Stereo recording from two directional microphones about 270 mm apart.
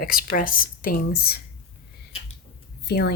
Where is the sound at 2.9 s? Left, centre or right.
Left.